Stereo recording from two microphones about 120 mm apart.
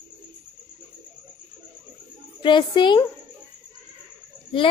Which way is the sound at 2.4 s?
40° left (ahead or behind).